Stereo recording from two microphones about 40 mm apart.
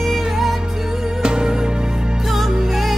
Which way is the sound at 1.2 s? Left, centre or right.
Right.